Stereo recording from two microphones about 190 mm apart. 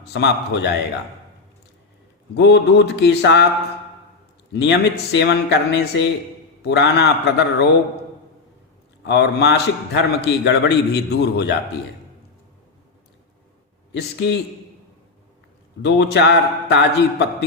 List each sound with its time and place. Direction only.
0.1 s a man's voice: 65° left (ahead or behind)
2.3 s a man's voice: 65° left (ahead or behind)
4.5 s a man's voice: 65° left (ahead or behind)
9.0 s a man's voice: 65° left (ahead or behind)
13.9 s a man's voice: 70° left (ahead or behind)
15.8 s a man's voice: 65° left (ahead or behind)